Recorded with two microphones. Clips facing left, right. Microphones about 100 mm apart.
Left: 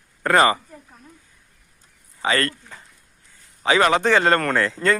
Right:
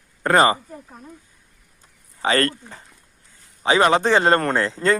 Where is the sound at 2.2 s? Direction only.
35° right (ahead or behind).